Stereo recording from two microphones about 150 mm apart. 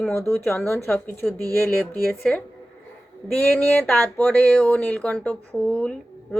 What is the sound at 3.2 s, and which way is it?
Speech, 10° left (ahead or behind).